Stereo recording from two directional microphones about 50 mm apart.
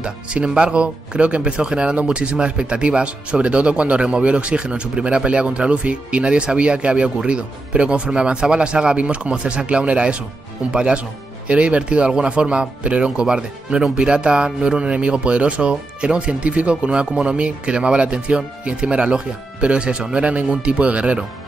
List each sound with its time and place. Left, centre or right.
0.0 s speech: centre